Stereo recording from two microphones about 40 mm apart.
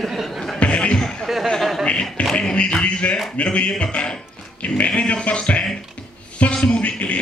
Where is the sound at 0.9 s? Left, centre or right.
Centre.